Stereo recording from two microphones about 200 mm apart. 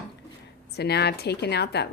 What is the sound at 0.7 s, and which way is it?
A woman's voice, 55° left (ahead or behind).